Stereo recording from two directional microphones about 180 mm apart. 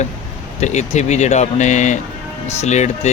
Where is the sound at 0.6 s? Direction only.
40° left (ahead or behind).